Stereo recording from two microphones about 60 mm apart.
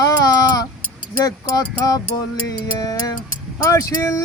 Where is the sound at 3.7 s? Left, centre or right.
Left.